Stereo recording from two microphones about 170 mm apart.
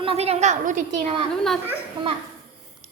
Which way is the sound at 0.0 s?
35° right (ahead or behind).